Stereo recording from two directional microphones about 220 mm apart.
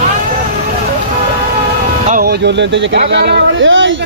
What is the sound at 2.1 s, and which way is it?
Speech, 40° right (ahead or behind).